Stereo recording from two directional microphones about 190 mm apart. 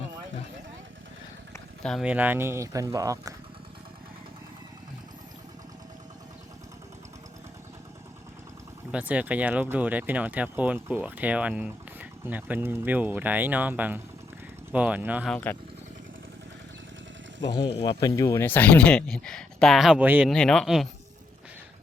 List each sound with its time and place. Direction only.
1.8 s speech: centre (ahead or behind); by 3.3 s 15° right (ahead or behind)
8.9 s speech: 5° right (ahead or behind)
15.3 s speech: 10° left (ahead or behind)
17.5 s speech: 25° left (ahead or behind); by 20.3 s 10° right (ahead or behind)
20.3 s speech: 5° left (ahead or behind)